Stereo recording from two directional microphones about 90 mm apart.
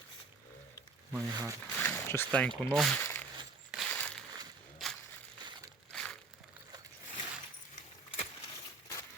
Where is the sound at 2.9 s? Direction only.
20° left (ahead or behind).